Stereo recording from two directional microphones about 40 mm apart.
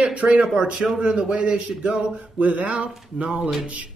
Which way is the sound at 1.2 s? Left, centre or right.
Right.